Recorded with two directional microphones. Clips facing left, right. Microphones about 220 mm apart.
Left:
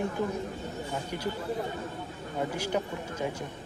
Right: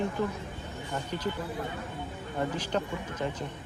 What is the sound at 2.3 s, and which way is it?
Speech, 10° left (ahead or behind).